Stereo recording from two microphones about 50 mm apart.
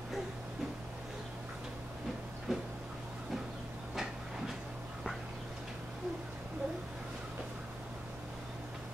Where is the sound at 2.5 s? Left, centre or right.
Centre.